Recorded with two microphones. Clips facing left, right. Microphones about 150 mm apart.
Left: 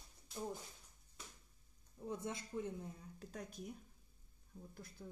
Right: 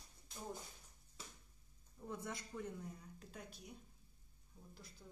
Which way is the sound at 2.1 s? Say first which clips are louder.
Left 3 dB; 20° left (ahead or behind).